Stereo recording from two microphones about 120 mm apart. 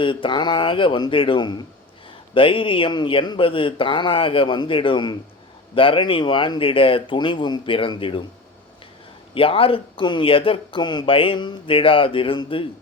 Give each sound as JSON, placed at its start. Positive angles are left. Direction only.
{"t": 0.0, "sound": "speech", "side_deg": 45}
{"t": 9.3, "sound": "speech", "side_deg": 50}